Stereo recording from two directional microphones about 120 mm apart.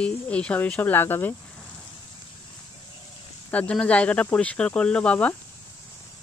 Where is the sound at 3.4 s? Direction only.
10° left (ahead or behind).